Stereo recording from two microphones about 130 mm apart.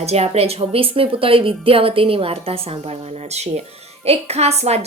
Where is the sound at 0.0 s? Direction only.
55° right (ahead or behind).